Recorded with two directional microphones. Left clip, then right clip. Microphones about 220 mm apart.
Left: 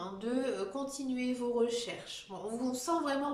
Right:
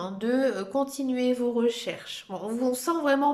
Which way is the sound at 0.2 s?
40° right (ahead or behind).